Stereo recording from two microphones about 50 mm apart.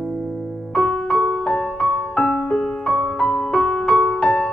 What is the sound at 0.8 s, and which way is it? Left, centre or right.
Music, centre.